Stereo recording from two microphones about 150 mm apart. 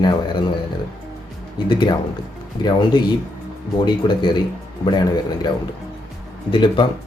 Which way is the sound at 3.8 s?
30° left (ahead or behind).